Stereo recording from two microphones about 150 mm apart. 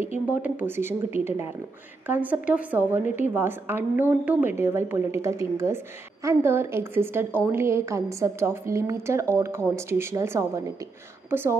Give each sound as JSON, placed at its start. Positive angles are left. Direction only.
{"t": 0.3, "sound": "a woman's voice", "side_deg": -10}